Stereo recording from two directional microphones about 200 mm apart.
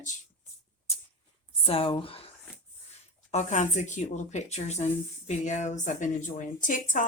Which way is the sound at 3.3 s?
35° left (ahead or behind).